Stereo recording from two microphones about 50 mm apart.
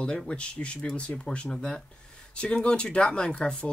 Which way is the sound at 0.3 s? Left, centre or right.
Left.